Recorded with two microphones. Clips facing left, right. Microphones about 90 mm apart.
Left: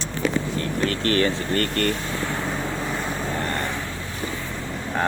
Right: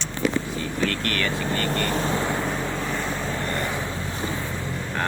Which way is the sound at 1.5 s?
50° left (ahead or behind).